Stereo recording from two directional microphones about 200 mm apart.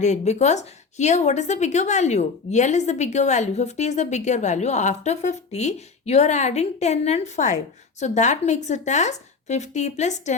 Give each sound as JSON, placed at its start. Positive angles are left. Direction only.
{"t": 0.0, "sound": "a woman's voice", "side_deg": 35}